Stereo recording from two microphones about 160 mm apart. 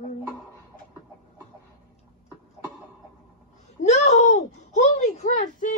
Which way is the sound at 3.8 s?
45° left (ahead or behind).